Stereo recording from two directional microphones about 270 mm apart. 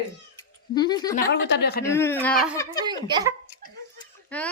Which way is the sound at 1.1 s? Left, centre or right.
Left.